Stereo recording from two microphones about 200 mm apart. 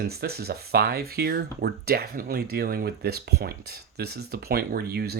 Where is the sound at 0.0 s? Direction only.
50° right (ahead or behind).